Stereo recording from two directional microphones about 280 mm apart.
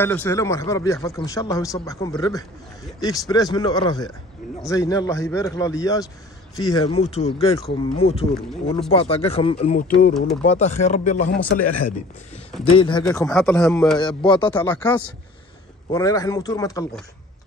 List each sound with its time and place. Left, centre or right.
0.0 s speech: centre; by 11.3 s left
12.6 s speech: centre
13.0 s a man's voice: centre
13.9 s speech: centre